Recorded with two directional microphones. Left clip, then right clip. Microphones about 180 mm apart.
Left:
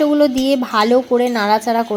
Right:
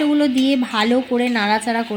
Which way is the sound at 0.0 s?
15° left (ahead or behind).